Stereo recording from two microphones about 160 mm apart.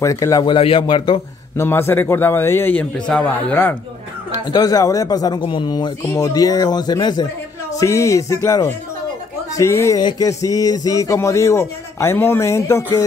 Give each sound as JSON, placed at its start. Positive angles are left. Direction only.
{"t": 0.0, "sound": "speech", "side_deg": 20}
{"t": 1.6, "sound": "a man's voice", "side_deg": 15}
{"t": 4.3, "sound": "speech", "side_deg": 25}